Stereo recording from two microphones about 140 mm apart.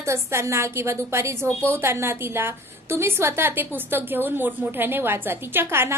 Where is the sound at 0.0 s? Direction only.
20° right (ahead or behind).